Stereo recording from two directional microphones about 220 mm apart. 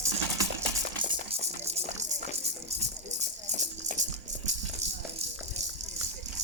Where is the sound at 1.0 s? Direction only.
25° right (ahead or behind).